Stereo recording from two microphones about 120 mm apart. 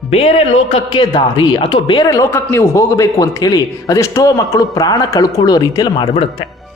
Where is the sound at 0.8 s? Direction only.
35° left (ahead or behind).